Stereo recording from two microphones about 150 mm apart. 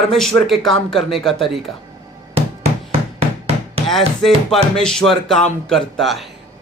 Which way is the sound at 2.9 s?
40° right (ahead or behind).